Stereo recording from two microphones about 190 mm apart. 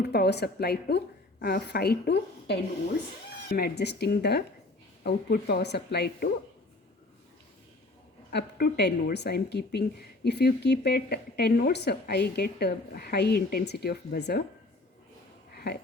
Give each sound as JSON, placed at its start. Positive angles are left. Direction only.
{"t": 0.0, "sound": "a woman's voice", "side_deg": 60}
{"t": 8.3, "sound": "a woman's voice", "side_deg": 55}
{"t": 15.5, "sound": "a sound", "side_deg": 55}